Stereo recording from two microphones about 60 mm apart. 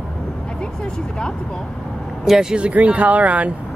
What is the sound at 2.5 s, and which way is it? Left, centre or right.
Speech, right.